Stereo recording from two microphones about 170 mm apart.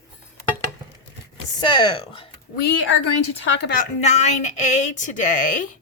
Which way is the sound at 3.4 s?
90° left.